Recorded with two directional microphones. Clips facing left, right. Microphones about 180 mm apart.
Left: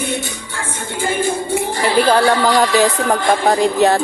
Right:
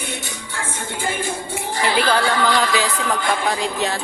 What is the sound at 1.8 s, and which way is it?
Speech, 40° left (ahead or behind).